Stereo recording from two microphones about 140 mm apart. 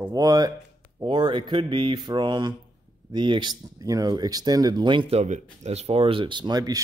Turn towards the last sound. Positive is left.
turn(degrees=-30)  # may be behind; listen again after turning